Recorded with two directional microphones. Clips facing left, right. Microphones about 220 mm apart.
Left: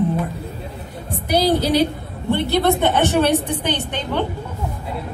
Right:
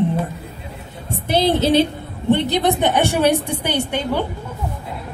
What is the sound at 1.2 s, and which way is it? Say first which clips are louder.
A woman's voice: right 1 dB; 25° right (ahead or behind).